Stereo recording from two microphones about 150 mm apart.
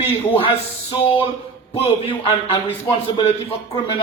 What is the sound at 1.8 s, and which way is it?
Speech, 35° left (ahead or behind).